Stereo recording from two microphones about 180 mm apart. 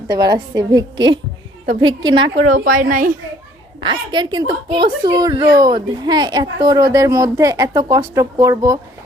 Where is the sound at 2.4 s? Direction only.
50° right (ahead or behind).